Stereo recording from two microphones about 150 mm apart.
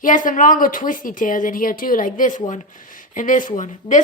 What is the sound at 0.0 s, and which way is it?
Speech, 60° left (ahead or behind).